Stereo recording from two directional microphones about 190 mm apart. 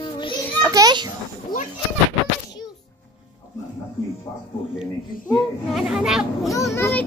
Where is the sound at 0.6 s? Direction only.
20° right (ahead or behind).